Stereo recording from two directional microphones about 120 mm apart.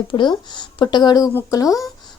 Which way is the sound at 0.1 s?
40° left (ahead or behind).